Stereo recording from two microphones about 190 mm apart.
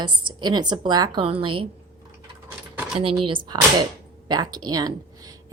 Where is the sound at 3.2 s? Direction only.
25° right (ahead or behind).